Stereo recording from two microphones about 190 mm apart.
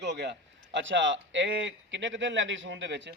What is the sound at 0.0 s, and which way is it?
A man's voice, 65° right (ahead or behind).